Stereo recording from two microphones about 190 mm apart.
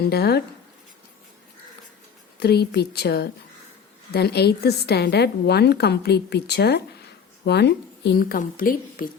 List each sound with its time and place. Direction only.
0.0 s a woman's voice: 55° left (ahead or behind)
2.4 s a woman's voice: 60° left (ahead or behind)